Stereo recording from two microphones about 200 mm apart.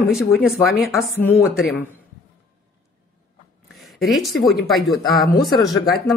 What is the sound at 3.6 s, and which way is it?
Speech, centre (ahead or behind).